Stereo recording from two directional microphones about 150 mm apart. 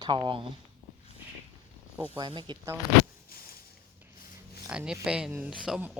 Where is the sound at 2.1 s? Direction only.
35° right (ahead or behind).